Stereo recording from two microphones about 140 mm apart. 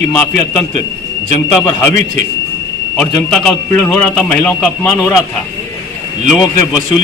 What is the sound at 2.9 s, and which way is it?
A man's voice, 5° left (ahead or behind).